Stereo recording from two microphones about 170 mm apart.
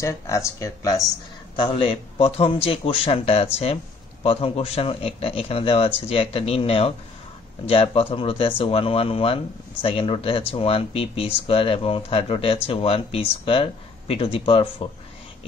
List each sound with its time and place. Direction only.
0.0 s speech: 15° left (ahead or behind)
1.6 s speech: 35° left (ahead or behind)